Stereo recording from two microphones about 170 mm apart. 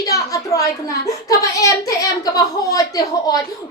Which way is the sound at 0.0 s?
20° left (ahead or behind).